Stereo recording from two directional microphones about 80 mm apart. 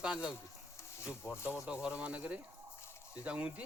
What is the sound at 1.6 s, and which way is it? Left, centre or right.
Speech, centre.